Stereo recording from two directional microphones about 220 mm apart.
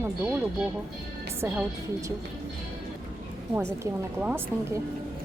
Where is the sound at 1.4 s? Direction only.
10° right (ahead or behind).